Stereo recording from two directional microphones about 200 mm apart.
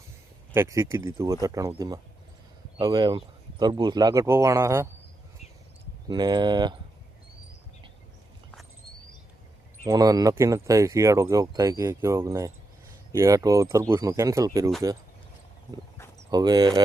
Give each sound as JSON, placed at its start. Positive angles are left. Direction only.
{"t": 0.5, "sound": "speech", "side_deg": -15}
{"t": 6.1, "sound": "speech", "side_deg": -20}
{"t": 9.8, "sound": "speech", "side_deg": -15}
{"t": 16.3, "sound": "speech", "side_deg": -20}